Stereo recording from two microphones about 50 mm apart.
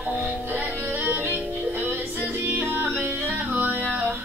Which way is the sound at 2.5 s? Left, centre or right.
Right.